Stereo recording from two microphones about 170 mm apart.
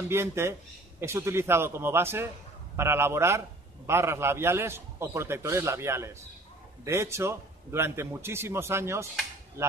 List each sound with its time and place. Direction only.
0.1 s a man's voice: 15° right (ahead or behind)